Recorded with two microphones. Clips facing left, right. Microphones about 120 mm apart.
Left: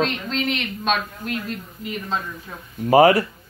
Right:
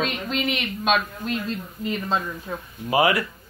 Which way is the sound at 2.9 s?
40° left (ahead or behind).